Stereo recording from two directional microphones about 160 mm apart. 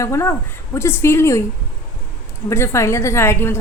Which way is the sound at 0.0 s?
15° left (ahead or behind).